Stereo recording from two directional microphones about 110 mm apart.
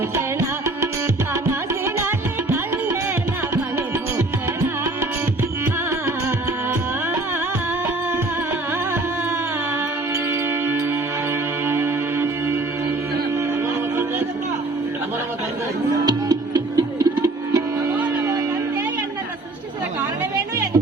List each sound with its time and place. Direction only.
11.7 s music: 20° right (ahead or behind)
16.0 s music: 40° right (ahead or behind)
17.9 s music: 15° right (ahead or behind)